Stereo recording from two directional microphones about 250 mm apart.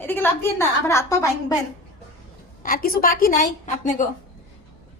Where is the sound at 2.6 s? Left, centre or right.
Left.